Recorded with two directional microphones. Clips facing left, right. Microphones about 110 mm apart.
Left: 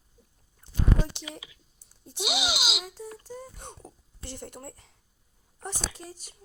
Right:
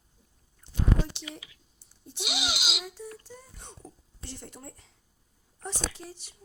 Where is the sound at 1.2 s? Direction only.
15° left (ahead or behind).